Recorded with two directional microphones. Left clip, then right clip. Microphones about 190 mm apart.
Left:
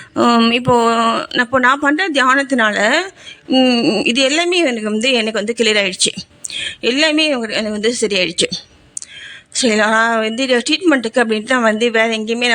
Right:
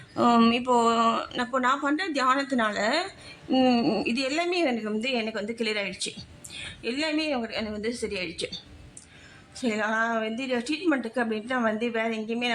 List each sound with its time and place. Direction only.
0.2 s speech: 20° left (ahead or behind)